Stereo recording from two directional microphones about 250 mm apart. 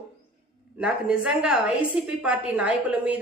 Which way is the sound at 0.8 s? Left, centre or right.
Centre.